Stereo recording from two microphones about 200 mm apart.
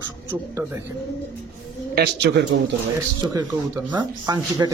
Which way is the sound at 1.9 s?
60° right (ahead or behind).